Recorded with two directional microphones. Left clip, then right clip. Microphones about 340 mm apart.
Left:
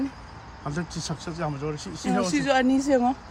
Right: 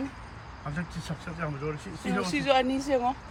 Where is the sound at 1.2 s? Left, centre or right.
Centre.